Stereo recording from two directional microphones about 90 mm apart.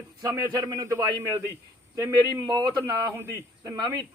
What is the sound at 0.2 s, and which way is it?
A man's voice, 40° right (ahead or behind).